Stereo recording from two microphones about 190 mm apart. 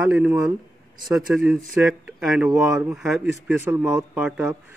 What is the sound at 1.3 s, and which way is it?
Speech, centre (ahead or behind).